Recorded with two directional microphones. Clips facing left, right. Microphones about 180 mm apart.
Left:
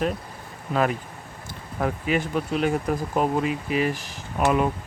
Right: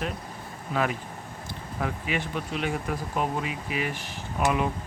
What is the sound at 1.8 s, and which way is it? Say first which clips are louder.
Speech: left 6 dB; 40° left (ahead or behind).